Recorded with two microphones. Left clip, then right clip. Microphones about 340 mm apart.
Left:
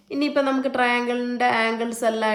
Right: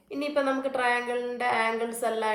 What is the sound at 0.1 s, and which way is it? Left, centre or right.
Speech, left.